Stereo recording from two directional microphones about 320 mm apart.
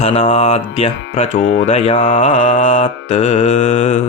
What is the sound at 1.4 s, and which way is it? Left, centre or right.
Speech, left.